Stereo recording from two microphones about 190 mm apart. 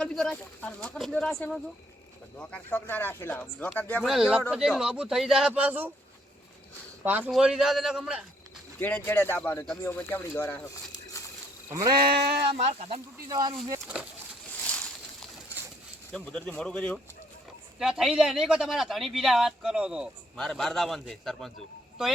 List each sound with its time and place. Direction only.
0.0 s a man's voice: 5° left (ahead or behind)
4.1 s a man's voice: centre (ahead or behind)
7.0 s a man's voice: 10° right (ahead or behind)
8.8 s speech: 10° left (ahead or behind)
11.1 s a sound: 15° left (ahead or behind)
11.7 s sheep: 20° right (ahead or behind)
12.0 s speech: 55° right (ahead or behind)
12.5 s speech: 35° right (ahead or behind)
13.1 s speech: 20° right (ahead or behind)
13.8 s a man's voice: 5° right (ahead or behind)
16.1 s a man's voice: 5° left (ahead or behind)